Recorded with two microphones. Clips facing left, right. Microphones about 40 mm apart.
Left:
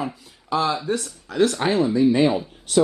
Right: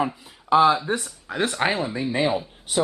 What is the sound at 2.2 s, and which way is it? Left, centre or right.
Speech, centre.